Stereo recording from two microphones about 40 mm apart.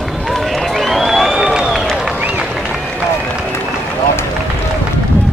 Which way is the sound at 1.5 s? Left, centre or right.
Centre.